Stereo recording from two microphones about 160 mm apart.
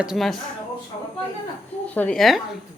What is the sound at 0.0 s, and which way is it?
Speech, centre (ahead or behind).